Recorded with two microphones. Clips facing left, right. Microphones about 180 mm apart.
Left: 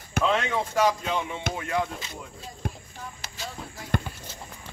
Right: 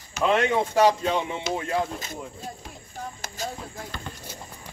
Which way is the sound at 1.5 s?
55° left (ahead or behind).